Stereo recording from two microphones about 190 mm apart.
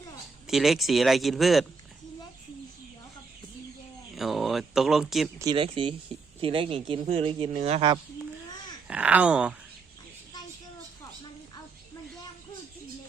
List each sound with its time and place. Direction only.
0.4 s speech: centre (ahead or behind)
4.1 s speech: centre (ahead or behind)
5.4 s speech: 25° right (ahead or behind)
8.9 s speech: 5° right (ahead or behind)